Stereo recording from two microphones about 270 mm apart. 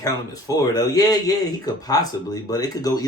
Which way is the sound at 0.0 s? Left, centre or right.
Centre.